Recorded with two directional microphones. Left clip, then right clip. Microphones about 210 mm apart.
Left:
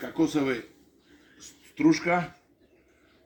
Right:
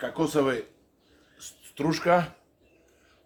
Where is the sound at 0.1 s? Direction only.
25° right (ahead or behind).